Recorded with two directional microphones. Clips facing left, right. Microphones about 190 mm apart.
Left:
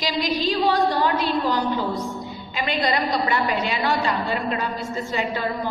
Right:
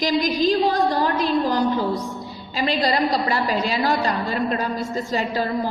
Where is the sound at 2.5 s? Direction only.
35° right (ahead or behind).